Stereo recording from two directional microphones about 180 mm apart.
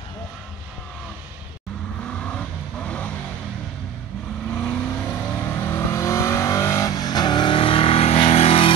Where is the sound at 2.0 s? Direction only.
5° left (ahead or behind).